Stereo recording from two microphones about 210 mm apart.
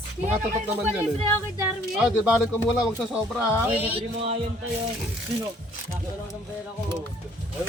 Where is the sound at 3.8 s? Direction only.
30° right (ahead or behind).